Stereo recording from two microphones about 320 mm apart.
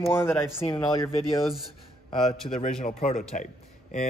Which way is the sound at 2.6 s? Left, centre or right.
Left.